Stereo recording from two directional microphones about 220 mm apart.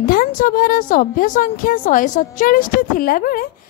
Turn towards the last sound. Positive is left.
turn(degrees=40)  # may be behind; listen again after turning